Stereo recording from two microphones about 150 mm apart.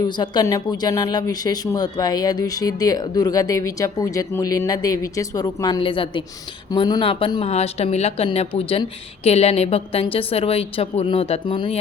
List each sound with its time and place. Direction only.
0.0 s a woman's voice: 30° left (ahead or behind)
7.4 s a woman's voice: 45° left (ahead or behind)